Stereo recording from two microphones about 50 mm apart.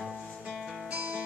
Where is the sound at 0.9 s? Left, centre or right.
Centre.